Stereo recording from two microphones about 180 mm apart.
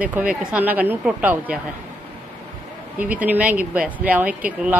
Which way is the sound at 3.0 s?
10° right (ahead or behind).